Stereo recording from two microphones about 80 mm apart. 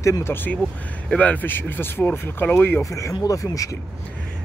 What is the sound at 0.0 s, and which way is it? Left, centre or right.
Speech, left.